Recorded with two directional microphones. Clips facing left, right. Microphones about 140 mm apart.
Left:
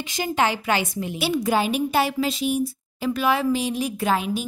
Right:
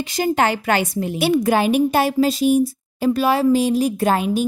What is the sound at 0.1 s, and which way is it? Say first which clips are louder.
A woman's voice: right 4 dB; 50° right (ahead or behind).